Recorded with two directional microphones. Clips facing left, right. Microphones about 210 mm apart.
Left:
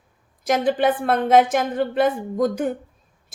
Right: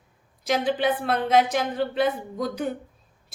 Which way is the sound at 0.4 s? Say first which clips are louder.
Left 4 dB; 50° left (ahead or behind).